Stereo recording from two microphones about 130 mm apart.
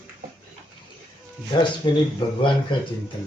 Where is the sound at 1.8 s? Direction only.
30° left (ahead or behind).